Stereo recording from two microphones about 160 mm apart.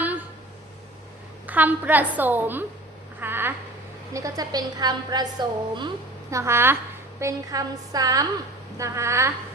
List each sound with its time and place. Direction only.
1.5 s a woman's voice: 10° right (ahead or behind)
3.2 s a sound: 15° right (ahead or behind)
4.1 s a woman's voice: 20° right (ahead or behind)
6.3 s a woman's voice: 15° right (ahead or behind)